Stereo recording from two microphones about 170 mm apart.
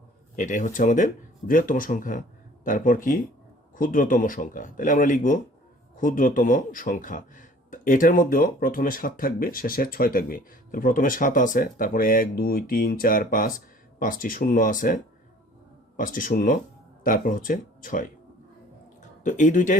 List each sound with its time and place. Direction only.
0.3 s speech: 45° left (ahead or behind)
16.0 s speech: 50° left (ahead or behind)
19.2 s speech: 45° left (ahead or behind)